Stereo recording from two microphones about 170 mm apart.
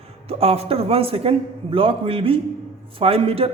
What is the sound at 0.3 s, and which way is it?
A man's voice, 35° right (ahead or behind).